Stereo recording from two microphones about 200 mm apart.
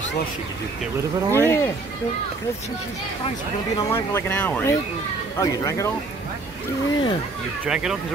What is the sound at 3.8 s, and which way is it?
Speech, 10° left (ahead or behind).